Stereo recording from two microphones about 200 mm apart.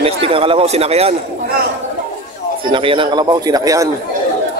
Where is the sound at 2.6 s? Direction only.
25° right (ahead or behind).